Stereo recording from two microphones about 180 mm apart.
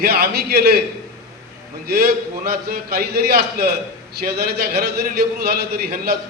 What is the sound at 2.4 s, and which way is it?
A man's voice, 60° right (ahead or behind).